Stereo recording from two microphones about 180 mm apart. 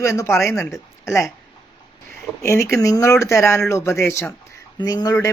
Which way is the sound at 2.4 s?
15° left (ahead or behind).